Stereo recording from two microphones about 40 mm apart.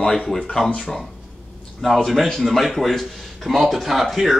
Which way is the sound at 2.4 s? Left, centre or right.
Centre.